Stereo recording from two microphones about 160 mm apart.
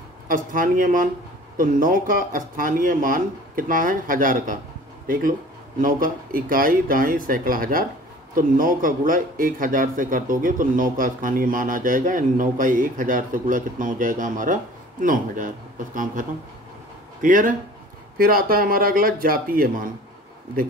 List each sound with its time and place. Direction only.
0.3 s speech: 60° right (ahead or behind)